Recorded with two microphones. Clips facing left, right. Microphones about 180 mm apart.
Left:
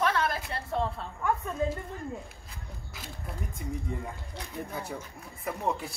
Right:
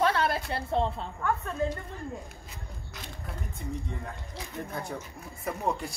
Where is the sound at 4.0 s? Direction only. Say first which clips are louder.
Even; 5° left (ahead or behind).